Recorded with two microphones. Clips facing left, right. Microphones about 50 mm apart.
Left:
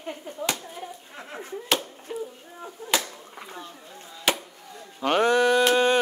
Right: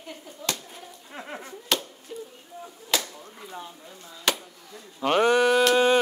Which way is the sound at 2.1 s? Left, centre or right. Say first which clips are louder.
Left 5 dB; left.